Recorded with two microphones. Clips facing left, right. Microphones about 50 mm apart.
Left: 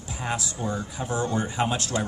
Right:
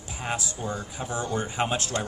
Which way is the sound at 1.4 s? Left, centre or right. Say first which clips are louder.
Left 1 dB; right.